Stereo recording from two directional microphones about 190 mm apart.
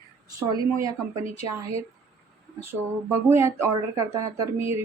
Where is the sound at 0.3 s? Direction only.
15° right (ahead or behind).